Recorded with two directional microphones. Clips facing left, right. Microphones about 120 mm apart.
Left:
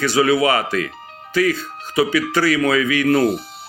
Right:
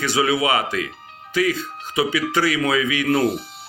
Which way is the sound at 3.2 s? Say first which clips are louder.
Left 3 dB; 40° left (ahead or behind).